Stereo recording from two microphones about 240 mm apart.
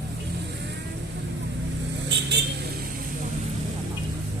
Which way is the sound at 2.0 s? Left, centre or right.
Right.